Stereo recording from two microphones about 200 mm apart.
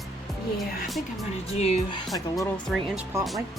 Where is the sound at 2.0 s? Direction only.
Centre (ahead or behind).